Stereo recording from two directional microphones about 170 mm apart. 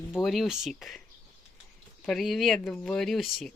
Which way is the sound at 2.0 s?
Centre (ahead or behind).